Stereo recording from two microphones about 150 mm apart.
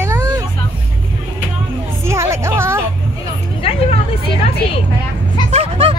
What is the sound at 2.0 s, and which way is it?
Music, 20° right (ahead or behind).